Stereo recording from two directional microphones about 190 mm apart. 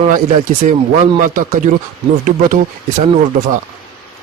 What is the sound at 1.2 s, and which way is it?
Speech, 45° right (ahead or behind).